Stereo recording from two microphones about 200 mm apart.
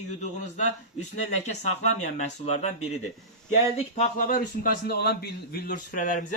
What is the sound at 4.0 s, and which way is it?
A man's voice, 45° left (ahead or behind).